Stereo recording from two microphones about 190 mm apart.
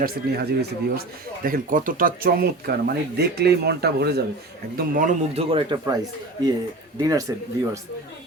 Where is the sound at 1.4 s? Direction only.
45° right (ahead or behind).